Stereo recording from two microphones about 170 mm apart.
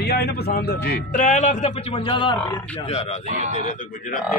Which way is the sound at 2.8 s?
40° left (ahead or behind).